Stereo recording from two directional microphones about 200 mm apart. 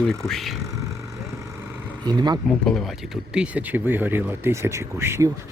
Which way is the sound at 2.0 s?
20° right (ahead or behind).